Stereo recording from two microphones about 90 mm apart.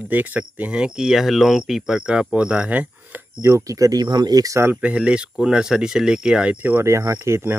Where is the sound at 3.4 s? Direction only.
35° right (ahead or behind).